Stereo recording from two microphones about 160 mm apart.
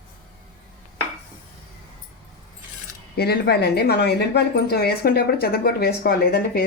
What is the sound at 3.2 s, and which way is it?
Speech, 85° left.